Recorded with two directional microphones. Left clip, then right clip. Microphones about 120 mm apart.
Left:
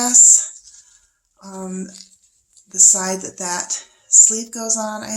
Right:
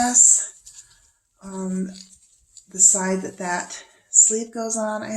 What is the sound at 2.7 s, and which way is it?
A woman's voice, 30° left (ahead or behind).